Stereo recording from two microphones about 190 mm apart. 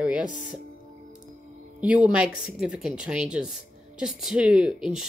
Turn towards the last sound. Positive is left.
turn(degrees=0)  # may be behind; listen again after turning